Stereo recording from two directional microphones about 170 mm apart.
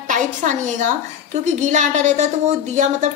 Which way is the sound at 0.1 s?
45° right (ahead or behind).